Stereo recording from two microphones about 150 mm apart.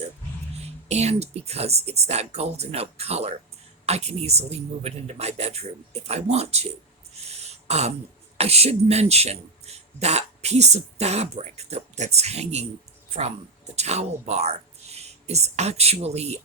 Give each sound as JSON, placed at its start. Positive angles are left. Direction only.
{"t": 0.9, "sound": "a man's voice", "side_deg": -45}
{"t": 13.7, "sound": "speech", "side_deg": -45}